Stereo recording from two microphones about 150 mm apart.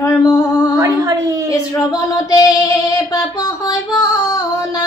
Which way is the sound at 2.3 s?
25° left (ahead or behind).